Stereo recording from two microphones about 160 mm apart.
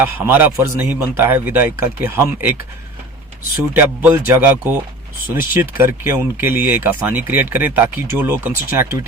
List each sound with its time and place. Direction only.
0.0 s speech: 15° right (ahead or behind)
3.8 s speech: 10° right (ahead or behind)